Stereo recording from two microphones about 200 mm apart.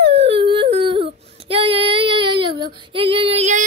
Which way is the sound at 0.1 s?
30° right (ahead or behind).